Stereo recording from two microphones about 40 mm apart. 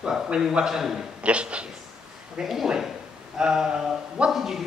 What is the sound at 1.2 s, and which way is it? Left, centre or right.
Speech, right.